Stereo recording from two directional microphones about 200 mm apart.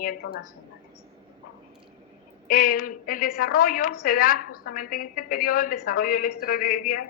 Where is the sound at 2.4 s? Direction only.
45° left (ahead or behind).